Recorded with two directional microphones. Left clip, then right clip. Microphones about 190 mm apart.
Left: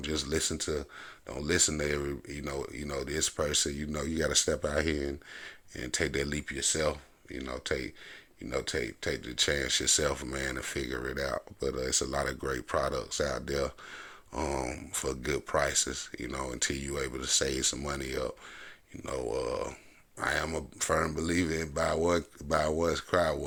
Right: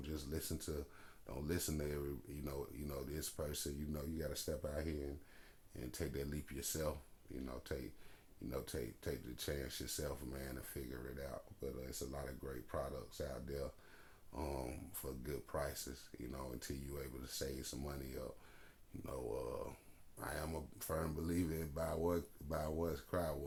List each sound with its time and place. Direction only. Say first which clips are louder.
0.0 s speech: left 16 dB; 25° left (ahead or behind)
5.7 s speech: left 14 dB; 25° left (ahead or behind)